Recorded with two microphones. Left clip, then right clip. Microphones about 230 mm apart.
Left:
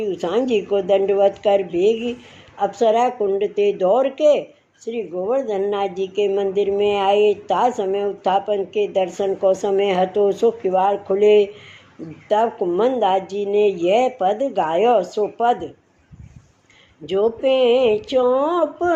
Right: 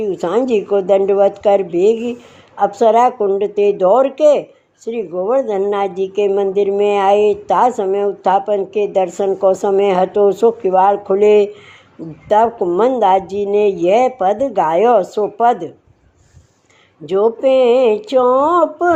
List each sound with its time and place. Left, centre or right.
0.0 s speech: right
17.1 s speech: right